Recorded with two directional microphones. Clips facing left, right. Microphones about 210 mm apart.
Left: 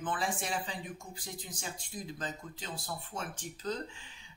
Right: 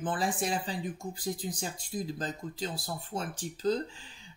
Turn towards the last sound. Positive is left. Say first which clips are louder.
# right 8 dB
turn(degrees=-35)  # may be behind; listen again after turning